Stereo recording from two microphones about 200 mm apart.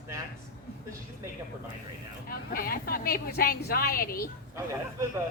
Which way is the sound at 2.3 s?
50° left (ahead or behind).